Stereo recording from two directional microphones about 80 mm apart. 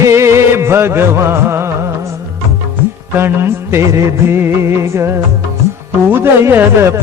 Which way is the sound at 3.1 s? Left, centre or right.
Right.